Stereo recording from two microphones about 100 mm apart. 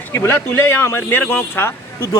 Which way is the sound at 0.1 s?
25° left (ahead or behind).